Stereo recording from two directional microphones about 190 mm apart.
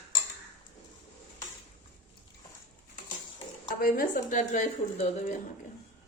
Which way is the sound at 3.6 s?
45° left (ahead or behind).